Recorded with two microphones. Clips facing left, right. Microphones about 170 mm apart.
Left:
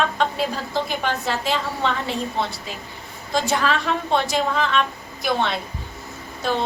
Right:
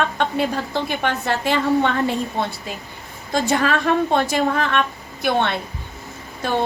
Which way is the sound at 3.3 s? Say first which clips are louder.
Right 2 dB; 55° right (ahead or behind).